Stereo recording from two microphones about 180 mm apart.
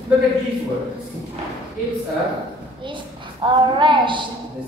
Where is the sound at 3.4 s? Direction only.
25° right (ahead or behind).